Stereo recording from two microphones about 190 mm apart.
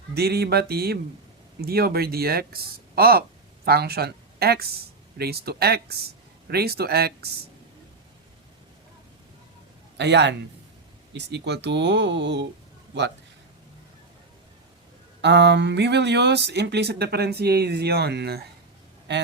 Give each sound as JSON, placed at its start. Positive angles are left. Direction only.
{"t": 0.1, "sound": "speech", "side_deg": -55}
{"t": 10.0, "sound": "speech", "side_deg": -65}
{"t": 15.2, "sound": "speech", "side_deg": -65}